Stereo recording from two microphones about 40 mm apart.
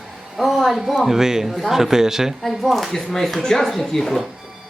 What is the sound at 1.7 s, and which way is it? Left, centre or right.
A woman's voice, centre.